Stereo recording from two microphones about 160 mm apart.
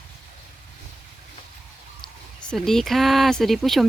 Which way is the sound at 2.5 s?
Centre (ahead or behind).